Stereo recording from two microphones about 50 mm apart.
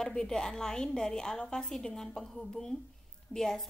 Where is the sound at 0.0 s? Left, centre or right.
Centre.